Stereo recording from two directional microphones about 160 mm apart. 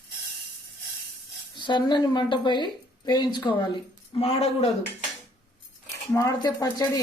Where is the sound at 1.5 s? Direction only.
30° left (ahead or behind).